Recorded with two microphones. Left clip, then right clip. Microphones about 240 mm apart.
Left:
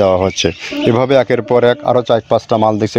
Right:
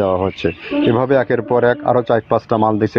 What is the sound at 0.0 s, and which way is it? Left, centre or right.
Speech, left.